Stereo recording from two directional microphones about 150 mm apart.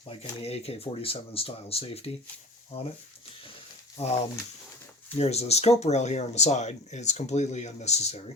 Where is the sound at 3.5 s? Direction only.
45° left (ahead or behind).